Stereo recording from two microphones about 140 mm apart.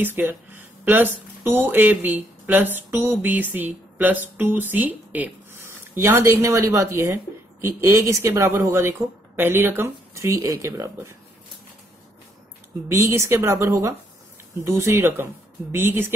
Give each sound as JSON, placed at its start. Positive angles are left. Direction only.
{"t": 0.0, "sound": "speech", "side_deg": -15}
{"t": 12.8, "sound": "speech", "side_deg": -20}